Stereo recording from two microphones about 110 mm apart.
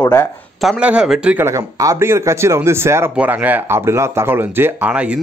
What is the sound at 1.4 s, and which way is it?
A man's voice, 30° right (ahead or behind).